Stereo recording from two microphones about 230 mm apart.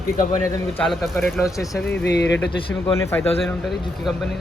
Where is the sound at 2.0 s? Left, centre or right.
Left.